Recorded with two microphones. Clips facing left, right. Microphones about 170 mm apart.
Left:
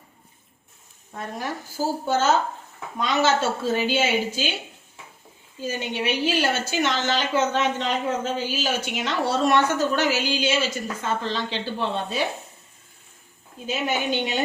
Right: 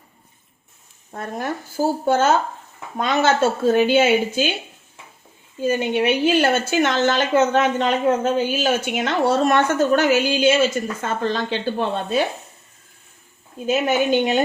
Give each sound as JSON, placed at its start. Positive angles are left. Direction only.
{"t": 1.1, "sound": "a woman's voice", "side_deg": -55}
{"t": 5.5, "sound": "a woman's voice", "side_deg": -55}
{"t": 13.7, "sound": "a woman's voice", "side_deg": -50}